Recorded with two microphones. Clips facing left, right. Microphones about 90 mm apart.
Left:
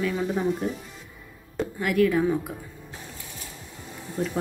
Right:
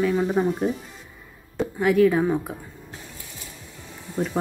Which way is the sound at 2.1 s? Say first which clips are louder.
Right 1 dB; 30° right (ahead or behind).